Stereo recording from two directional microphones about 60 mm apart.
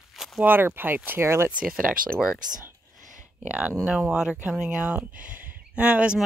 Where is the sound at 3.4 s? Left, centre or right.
Right.